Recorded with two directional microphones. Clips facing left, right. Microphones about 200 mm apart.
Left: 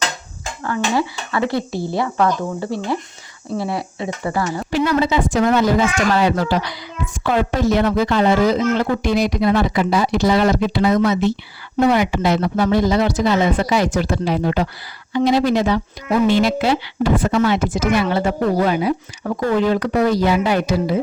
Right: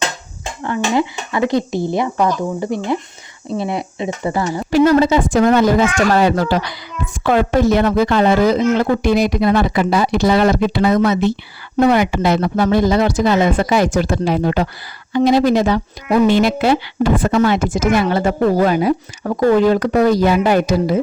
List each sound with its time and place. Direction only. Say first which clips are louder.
0.6 s speech: right 2 dB; 20° right (ahead or behind)
4.7 s speech: right 6 dB; 45° right (ahead or behind)
7.1 s speech: right 4 dB; 55° right (ahead or behind)